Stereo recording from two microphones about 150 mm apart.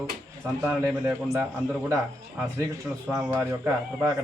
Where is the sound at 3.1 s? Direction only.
20° right (ahead or behind).